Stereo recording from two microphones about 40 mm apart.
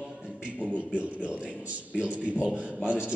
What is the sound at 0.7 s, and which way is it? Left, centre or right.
A man's voice, right.